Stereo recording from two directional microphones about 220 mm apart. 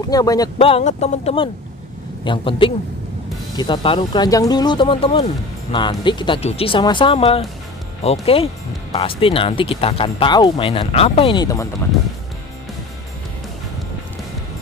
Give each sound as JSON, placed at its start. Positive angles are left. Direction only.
{"t": 0.1, "sound": "speech", "side_deg": 15}